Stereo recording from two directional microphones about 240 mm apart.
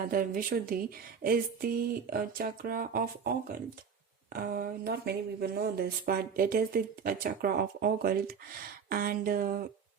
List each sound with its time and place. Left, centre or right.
0.0 s speech: right